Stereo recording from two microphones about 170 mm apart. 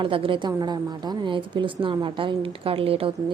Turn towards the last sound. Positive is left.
turn(degrees=-30)  # may be behind; listen again after turning